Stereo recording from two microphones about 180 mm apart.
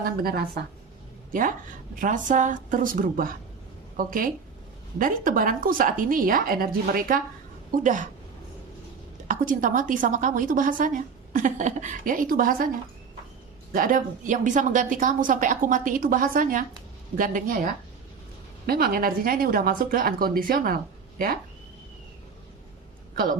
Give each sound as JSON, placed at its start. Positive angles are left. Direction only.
{"t": 0.0, "sound": "speech", "side_deg": -60}
{"t": 1.3, "sound": "a woman's voice", "side_deg": -50}
{"t": 9.2, "sound": "a woman's voice", "side_deg": -45}
{"t": 13.7, "sound": "a woman's voice", "side_deg": -50}